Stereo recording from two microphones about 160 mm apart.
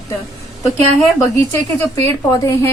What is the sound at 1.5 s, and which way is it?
A woman's voice, 15° left (ahead or behind).